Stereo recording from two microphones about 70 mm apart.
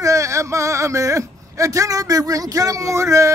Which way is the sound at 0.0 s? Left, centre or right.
Right.